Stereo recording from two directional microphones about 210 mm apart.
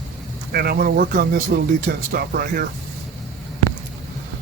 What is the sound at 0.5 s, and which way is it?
A man's voice, 50° right (ahead or behind).